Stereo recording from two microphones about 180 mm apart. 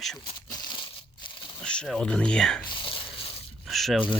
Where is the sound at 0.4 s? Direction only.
20° left (ahead or behind).